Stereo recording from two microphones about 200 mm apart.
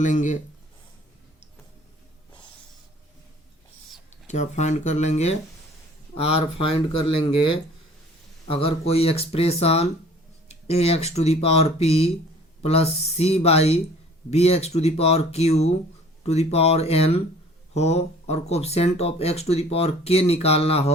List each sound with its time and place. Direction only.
0.0 s speech: 40° left (ahead or behind)
4.1 s speech: 35° left (ahead or behind)